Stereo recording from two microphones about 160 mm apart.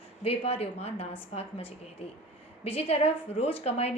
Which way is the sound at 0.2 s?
40° left (ahead or behind).